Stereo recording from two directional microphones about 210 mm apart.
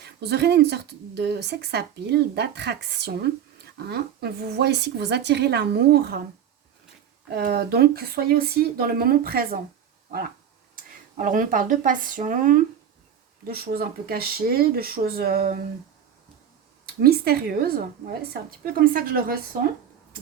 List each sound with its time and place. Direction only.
0.0 s speech: 50° right (ahead or behind)
7.3 s speech: 50° right (ahead or behind)
11.2 s speech: 40° right (ahead or behind)
16.8 s speech: 45° right (ahead or behind)